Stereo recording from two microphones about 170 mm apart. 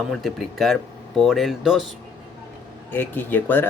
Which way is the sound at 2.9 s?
10° left (ahead or behind).